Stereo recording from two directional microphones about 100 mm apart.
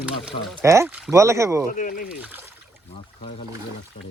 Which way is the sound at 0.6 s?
30° right (ahead or behind).